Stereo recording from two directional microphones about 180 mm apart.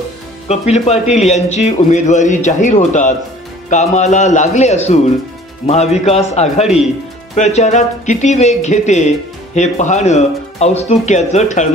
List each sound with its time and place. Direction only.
0.5 s speech: 35° left (ahead or behind)